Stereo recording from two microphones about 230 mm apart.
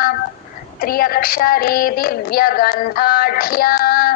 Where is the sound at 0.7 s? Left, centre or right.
Left.